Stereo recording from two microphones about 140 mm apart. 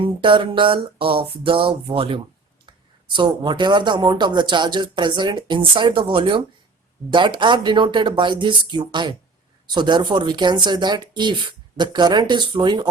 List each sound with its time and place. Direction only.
0.0 s speech: 40° right (ahead or behind)